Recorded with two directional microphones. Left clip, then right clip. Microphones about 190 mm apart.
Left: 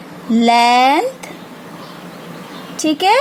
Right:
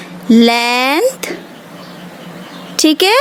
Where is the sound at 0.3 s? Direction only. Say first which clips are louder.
Even; 40° right (ahead or behind).